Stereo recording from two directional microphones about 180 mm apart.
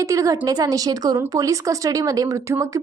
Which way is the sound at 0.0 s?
20° right (ahead or behind).